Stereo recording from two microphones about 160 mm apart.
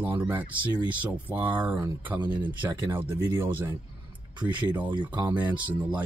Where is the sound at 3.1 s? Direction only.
15° right (ahead or behind).